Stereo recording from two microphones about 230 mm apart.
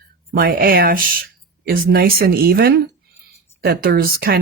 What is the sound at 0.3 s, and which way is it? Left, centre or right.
Speech, right.